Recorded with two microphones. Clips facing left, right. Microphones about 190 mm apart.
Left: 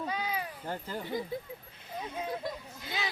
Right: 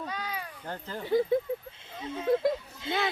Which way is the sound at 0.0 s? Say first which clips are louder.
Left 2 dB; 10° left (ahead or behind).